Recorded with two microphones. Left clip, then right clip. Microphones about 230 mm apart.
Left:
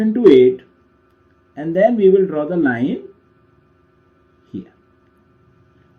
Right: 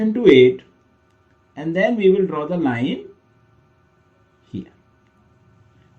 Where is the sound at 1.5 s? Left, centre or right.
Right.